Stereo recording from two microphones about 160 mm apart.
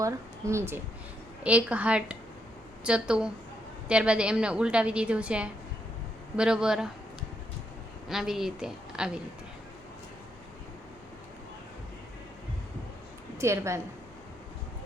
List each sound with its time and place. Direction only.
0.0 s a woman's voice: 20° right (ahead or behind)
8.1 s a woman's voice: 5° right (ahead or behind)
13.4 s a woman's voice: 15° right (ahead or behind)